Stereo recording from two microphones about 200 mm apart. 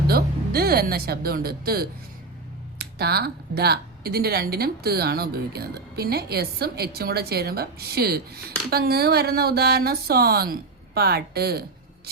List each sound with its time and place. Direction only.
0.1 s speech: 50° right (ahead or behind)